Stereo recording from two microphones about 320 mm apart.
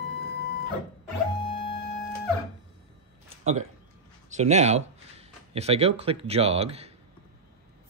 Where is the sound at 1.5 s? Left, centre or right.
Centre.